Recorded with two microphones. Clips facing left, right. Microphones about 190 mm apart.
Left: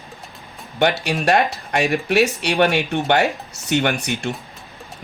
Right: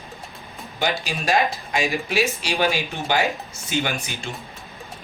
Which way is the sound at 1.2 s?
65° left (ahead or behind).